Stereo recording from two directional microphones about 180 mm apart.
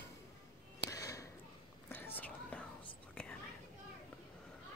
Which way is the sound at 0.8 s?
20° left (ahead or behind).